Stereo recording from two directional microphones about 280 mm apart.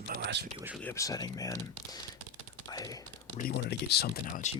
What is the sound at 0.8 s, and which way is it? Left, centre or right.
Speech, centre.